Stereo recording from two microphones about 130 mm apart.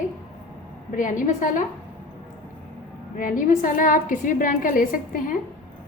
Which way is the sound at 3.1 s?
90° left.